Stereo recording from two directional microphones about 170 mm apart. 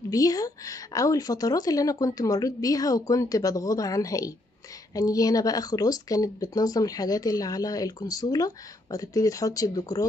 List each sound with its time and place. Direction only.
0.1 s speech: 20° left (ahead or behind)